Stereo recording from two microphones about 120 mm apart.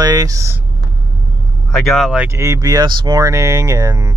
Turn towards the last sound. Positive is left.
turn(degrees=-30)  # may be behind; listen again after turning